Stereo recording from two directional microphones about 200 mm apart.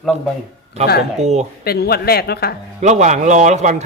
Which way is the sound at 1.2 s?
35° right (ahead or behind).